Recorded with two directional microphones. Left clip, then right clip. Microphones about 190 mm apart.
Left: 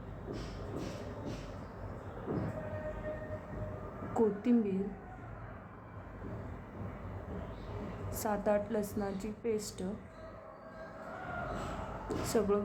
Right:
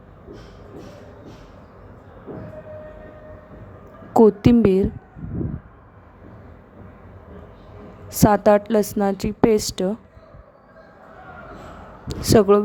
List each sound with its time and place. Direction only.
4.1 s a woman's voice: 60° right (ahead or behind)
8.1 s a woman's voice: 55° right (ahead or behind)
12.0 s a man's voice: 55° right (ahead or behind)